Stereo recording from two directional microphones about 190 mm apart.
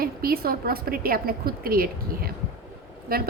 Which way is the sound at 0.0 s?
50° right (ahead or behind).